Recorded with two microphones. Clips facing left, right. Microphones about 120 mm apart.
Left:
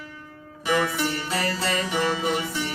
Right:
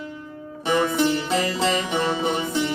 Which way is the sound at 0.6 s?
25° right (ahead or behind).